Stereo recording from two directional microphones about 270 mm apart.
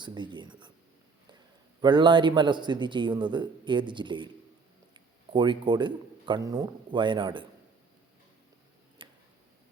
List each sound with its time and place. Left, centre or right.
0.0 s a man's voice: centre
1.8 s a man's voice: centre
9.0 s a sound: centre